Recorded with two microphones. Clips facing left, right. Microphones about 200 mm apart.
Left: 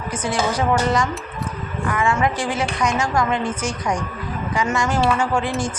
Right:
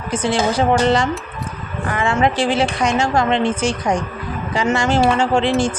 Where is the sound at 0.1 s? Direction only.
30° right (ahead or behind).